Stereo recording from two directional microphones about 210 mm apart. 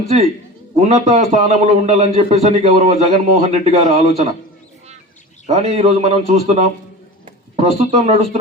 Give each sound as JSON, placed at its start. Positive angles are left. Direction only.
{"t": 0.8, "sound": "a man's voice", "side_deg": -35}
{"t": 5.5, "sound": "a man's voice", "side_deg": -30}